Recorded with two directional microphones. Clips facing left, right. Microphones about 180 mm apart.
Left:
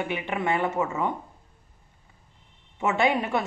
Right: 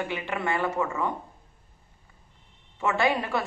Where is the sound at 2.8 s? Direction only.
20° left (ahead or behind).